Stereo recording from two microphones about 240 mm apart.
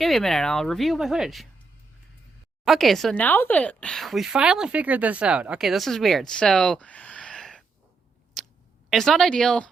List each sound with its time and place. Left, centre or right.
0.0 s a woman's voice: centre
2.6 s a woman's voice: centre
8.4 s a sound: centre
8.9 s a woman's voice: centre